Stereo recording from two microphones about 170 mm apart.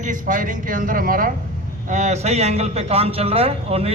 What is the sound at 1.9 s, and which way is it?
A man's voice, 45° right (ahead or behind).